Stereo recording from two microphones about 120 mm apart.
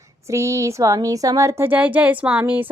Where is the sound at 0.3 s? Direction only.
25° right (ahead or behind).